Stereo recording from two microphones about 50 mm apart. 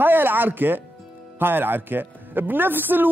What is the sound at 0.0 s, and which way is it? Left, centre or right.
Speech, right.